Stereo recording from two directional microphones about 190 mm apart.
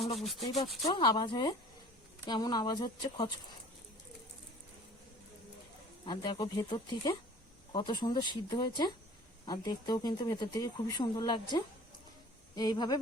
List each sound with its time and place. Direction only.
0.2 s rub: centre (ahead or behind)
0.9 s speech: 20° left (ahead or behind)
6.1 s speech: 20° left (ahead or behind)